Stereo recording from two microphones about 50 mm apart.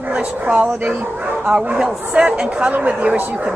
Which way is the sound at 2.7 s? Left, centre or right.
Right.